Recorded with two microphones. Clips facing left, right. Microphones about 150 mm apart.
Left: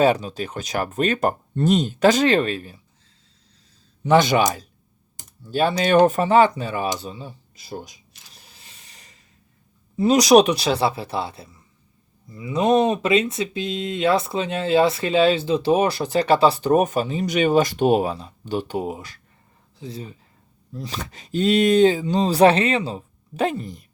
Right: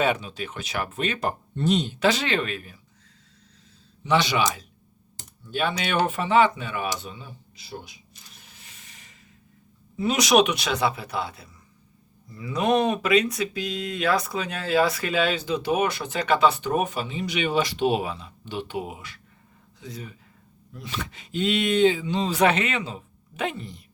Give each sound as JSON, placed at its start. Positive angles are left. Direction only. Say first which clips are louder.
{"t": 0.0, "sound": "speech", "louder": "left 6 dB", "side_deg": 35}
{"t": 4.0, "sound": "speech", "louder": "left 6 dB", "side_deg": 45}
{"t": 7.5, "sound": "speech", "louder": "left 4 dB", "side_deg": 45}
{"t": 8.4, "sound": "rub", "louder": "left 3 dB", "side_deg": 35}
{"t": 10.0, "sound": "speech", "louder": "left 6 dB", "side_deg": 35}